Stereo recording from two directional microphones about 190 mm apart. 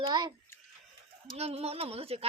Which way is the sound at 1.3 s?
35° right (ahead or behind).